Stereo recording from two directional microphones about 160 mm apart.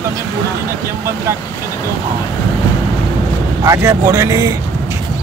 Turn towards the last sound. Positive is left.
turn(degrees=-20)  # may be behind; listen again after turning